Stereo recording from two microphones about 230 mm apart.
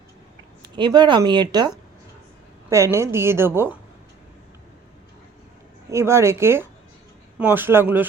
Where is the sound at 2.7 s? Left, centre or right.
Centre.